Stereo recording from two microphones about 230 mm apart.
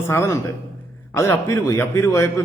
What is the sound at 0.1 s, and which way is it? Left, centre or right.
A man's voice, centre.